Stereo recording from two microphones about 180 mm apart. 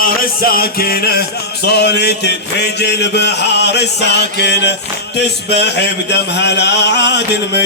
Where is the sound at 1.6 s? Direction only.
65° left (ahead or behind).